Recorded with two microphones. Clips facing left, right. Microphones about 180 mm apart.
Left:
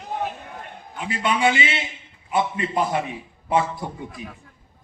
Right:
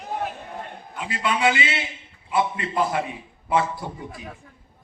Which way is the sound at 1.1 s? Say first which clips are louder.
Left 1 dB; 25° left (ahead or behind).